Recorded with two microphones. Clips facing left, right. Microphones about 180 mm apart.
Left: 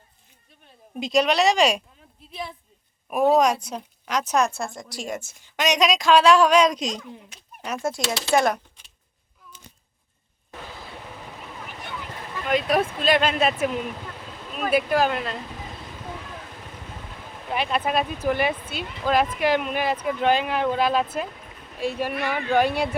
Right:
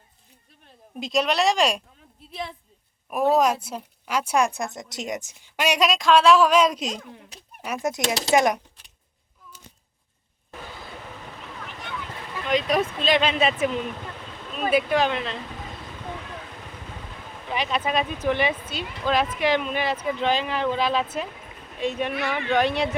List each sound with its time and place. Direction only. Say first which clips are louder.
0.9 s speech: left 3 dB; centre (ahead or behind)
3.1 s a woman's voice: left 2 dB; centre (ahead or behind); by 8.6 s 15° right (ahead or behind)
11.6 s boat: right 1 dB; 5° left (ahead or behind)
12.5 s speech: left 1 dB; 5° left (ahead or behind)
17.3 s speech: left 1 dB; 5° left (ahead or behind)